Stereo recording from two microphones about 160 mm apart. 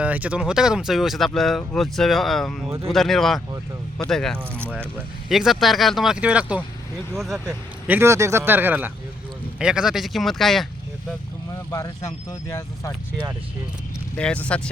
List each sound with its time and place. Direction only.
0.0 s speech: 10° right (ahead or behind)
4.5 s speech: 15° right (ahead or behind)
5.3 s speech: centre (ahead or behind)
11.7 s speech: 20° left (ahead or behind)
14.2 s speech: 5° left (ahead or behind)